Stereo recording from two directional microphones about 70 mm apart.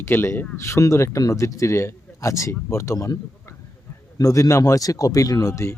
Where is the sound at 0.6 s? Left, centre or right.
Left.